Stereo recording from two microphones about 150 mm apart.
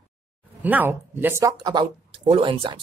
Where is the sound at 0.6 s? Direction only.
10° right (ahead or behind).